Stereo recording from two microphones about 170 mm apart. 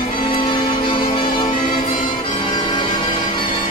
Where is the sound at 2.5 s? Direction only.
25° left (ahead or behind).